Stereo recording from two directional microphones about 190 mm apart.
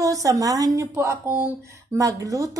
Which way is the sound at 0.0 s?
15° right (ahead or behind).